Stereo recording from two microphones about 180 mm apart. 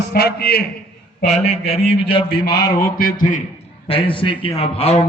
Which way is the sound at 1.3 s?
35° left (ahead or behind).